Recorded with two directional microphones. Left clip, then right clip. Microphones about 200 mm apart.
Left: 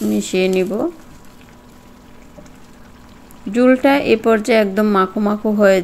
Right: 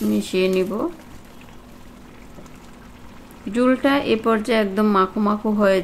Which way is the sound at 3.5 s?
15° left (ahead or behind).